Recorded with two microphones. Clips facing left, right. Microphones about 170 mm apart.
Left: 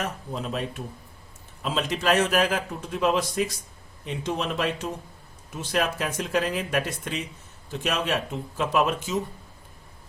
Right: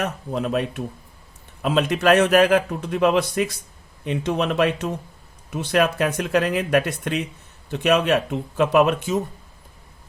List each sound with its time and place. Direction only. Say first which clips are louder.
0.0 s a man's voice: right 6 dB; 65° right (ahead or behind)
1.6 s a man's voice: right 7 dB; 60° right (ahead or behind)